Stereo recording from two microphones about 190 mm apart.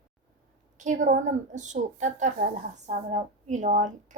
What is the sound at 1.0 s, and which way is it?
A woman's voice, 40° right (ahead or behind).